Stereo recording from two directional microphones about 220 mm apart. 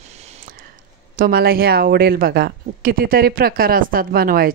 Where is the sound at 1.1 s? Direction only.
40° right (ahead or behind).